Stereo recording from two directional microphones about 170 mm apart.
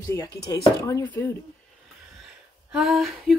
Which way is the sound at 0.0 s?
20° left (ahead or behind).